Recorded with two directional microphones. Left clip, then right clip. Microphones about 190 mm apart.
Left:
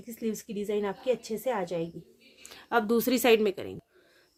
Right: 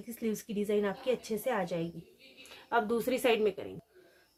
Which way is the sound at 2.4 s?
65° left (ahead or behind).